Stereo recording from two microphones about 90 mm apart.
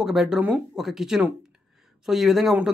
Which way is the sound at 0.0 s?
5° right (ahead or behind).